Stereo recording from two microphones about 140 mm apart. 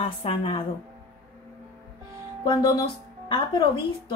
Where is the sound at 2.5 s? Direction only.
30° left (ahead or behind).